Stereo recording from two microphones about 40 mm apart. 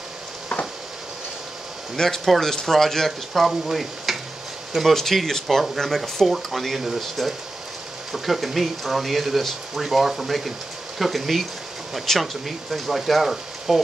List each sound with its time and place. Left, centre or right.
2.0 s speech: centre
3.1 s speech: centre
4.7 s speech: centre